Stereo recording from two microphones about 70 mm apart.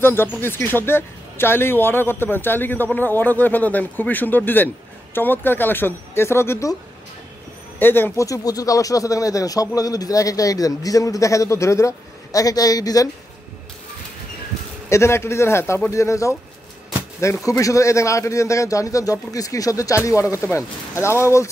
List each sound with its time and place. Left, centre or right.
0.0 s speech: left
7.8 s speech: left
8.2 s speech: left
14.9 s speech: left